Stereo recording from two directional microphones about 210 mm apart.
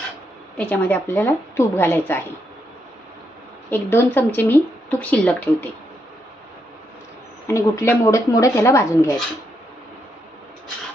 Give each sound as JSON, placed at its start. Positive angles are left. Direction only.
{"t": 0.5, "sound": "speech", "side_deg": 5}
{"t": 3.7, "sound": "speech", "side_deg": 10}
{"t": 7.4, "sound": "speech", "side_deg": 15}